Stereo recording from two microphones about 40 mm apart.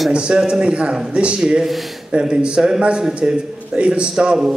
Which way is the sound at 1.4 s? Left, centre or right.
Centre.